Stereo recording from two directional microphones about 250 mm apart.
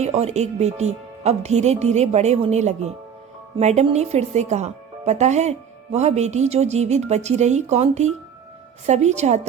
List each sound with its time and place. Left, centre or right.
0.0 s speech: right